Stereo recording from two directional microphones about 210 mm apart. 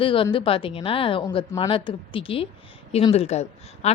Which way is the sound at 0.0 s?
25° left (ahead or behind).